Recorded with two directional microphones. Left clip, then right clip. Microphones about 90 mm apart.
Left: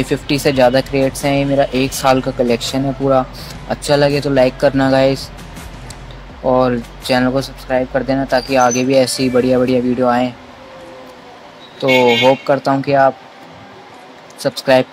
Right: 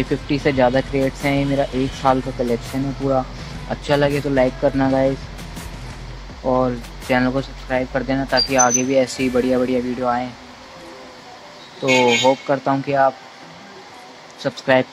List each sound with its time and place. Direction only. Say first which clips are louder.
0.0 s speech: left 4 dB; 45° left (ahead or behind)
6.4 s speech: left 5 dB; 35° left (ahead or behind)
11.8 s speech: left 4 dB; 40° left (ahead or behind)
14.5 s speech: left 4 dB; 40° left (ahead or behind)